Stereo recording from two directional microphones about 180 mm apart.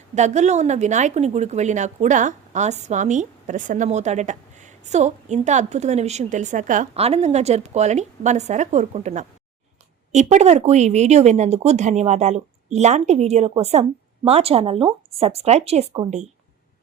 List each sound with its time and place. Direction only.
0.2 s a woman's voice: 40° right (ahead or behind)